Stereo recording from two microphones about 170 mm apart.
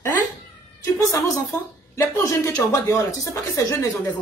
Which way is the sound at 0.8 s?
20° left (ahead or behind).